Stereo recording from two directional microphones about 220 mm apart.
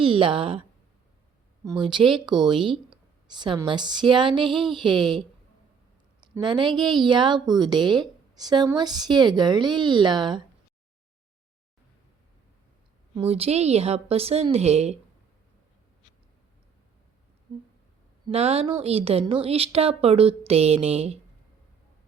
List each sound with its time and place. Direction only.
0.0 s a woman's voice: 25° right (ahead or behind)
1.6 s a woman's voice: 20° right (ahead or behind)
6.3 s a woman's voice: 20° right (ahead or behind)
13.2 s a woman's voice: 25° right (ahead or behind)
18.3 s a woman's voice: 25° right (ahead or behind)